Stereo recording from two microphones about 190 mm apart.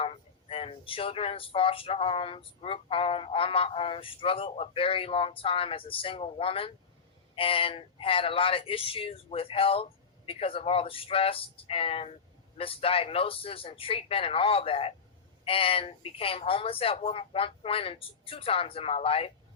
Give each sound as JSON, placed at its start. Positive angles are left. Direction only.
{"t": 0.0, "sound": "speech", "side_deg": 30}